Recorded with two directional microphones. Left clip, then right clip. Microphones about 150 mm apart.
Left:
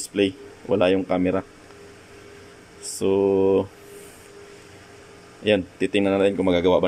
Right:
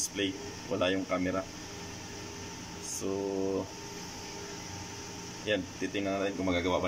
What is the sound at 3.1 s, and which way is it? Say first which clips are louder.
Speech: left 15 dB; 90° left.